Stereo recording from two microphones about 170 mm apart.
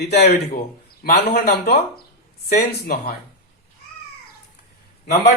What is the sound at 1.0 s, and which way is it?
Speech, 65° left (ahead or behind).